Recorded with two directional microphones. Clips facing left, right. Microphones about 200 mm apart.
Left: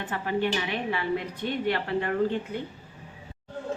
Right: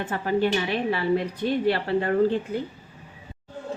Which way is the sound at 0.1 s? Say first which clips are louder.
Right 4 dB; 40° right (ahead or behind).